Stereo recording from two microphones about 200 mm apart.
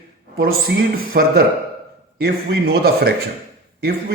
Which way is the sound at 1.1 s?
50° right (ahead or behind).